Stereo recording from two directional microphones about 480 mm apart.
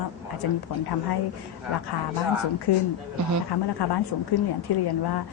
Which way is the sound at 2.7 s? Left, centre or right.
Left.